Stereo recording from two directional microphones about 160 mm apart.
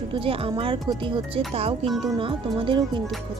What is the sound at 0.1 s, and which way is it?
Speech, 35° right (ahead or behind).